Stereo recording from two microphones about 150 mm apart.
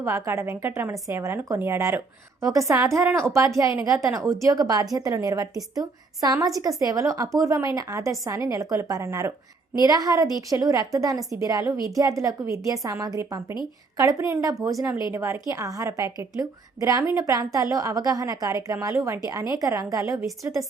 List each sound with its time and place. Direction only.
0.0 s a woman's voice: 20° right (ahead or behind)